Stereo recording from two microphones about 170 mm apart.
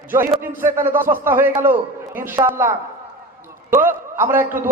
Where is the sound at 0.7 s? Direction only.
15° right (ahead or behind).